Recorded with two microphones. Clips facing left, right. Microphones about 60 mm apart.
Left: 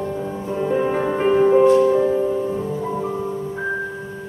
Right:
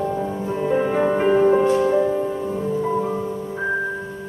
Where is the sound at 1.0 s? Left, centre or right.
Centre.